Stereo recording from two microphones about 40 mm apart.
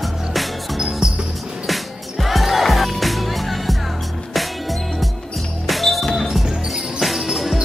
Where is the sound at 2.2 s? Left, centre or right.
Centre.